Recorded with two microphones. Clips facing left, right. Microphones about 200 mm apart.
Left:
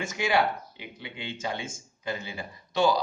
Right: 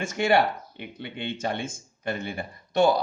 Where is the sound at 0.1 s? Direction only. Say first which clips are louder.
Right 4 dB; 60° right (ahead or behind).